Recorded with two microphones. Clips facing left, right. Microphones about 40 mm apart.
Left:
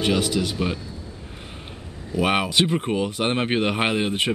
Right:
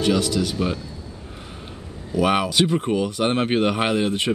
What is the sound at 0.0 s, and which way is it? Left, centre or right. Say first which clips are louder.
Speech: right 1 dB; centre.